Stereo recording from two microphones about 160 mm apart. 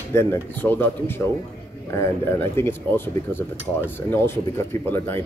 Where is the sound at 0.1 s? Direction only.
15° left (ahead or behind).